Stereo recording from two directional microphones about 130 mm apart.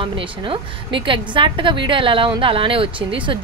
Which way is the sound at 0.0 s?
40° right (ahead or behind).